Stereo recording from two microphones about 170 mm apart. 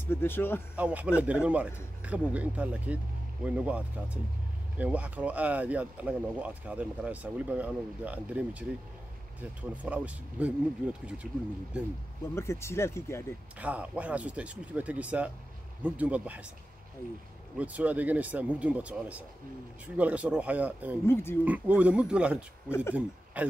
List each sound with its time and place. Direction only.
0.1 s speech: 15° left (ahead or behind)
0.7 s speech: 10° right (ahead or behind)
12.4 s speech: 15° left (ahead or behind)
13.6 s speech: 10° right (ahead or behind)
17.6 s speech: 10° right (ahead or behind)
21.0 s speech: 15° left (ahead or behind)
21.5 s speech: 10° right (ahead or behind)